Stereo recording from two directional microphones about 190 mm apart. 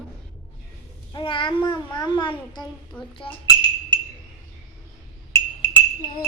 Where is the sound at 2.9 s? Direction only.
5° left (ahead or behind).